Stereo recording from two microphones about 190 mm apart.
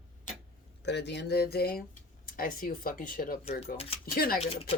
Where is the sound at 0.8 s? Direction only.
65° left (ahead or behind).